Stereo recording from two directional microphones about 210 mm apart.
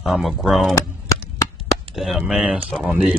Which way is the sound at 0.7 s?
15° left (ahead or behind).